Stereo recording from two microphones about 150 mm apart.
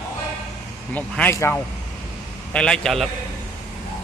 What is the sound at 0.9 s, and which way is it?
Speech, 10° left (ahead or behind).